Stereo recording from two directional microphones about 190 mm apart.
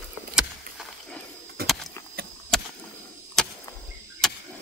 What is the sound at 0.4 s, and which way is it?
Rowboat, centre (ahead or behind).